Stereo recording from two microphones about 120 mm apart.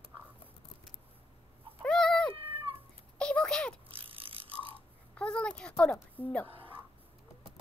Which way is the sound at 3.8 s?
50° right (ahead or behind).